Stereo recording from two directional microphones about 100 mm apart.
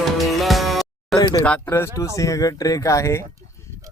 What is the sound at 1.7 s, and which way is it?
Speech, 30° left (ahead or behind).